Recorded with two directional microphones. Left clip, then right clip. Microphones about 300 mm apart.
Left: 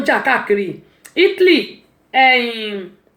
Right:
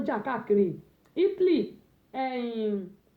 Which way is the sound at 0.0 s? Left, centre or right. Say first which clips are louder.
Left 16 dB; centre.